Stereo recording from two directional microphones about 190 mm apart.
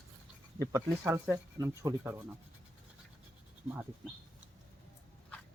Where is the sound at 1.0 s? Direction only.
10° right (ahead or behind).